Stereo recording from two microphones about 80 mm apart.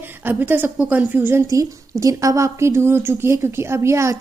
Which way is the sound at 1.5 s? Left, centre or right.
Right.